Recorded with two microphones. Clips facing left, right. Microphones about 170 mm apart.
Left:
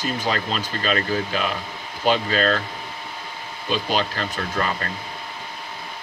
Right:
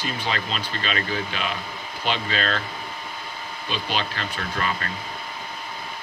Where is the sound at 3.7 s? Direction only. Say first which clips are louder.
Left 5 dB; 40° left (ahead or behind).